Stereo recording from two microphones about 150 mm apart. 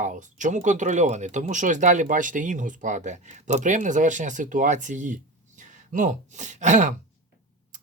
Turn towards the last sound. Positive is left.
turn(degrees=-55)  # may be behind; listen again after turning